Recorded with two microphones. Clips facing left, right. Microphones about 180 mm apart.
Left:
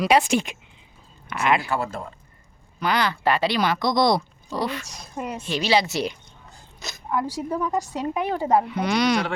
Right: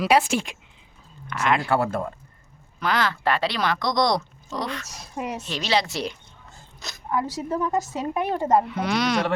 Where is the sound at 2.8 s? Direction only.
Centre (ahead or behind).